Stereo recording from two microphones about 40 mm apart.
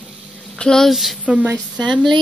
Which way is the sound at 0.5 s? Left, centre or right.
Centre.